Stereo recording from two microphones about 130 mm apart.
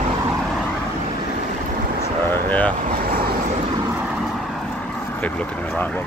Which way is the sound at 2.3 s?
10° left (ahead or behind).